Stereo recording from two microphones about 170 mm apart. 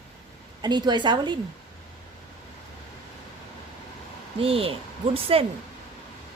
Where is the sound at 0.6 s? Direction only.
25° right (ahead or behind).